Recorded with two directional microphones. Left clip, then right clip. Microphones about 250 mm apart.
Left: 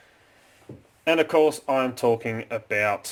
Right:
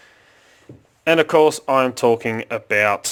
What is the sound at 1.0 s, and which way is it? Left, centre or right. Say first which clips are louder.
Speech: right 5 dB; right.